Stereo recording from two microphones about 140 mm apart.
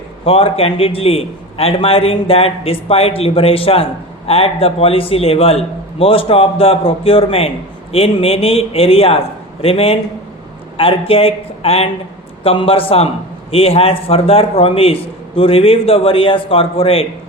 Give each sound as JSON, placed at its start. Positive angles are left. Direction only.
{"t": 0.3, "sound": "a man's voice", "side_deg": 40}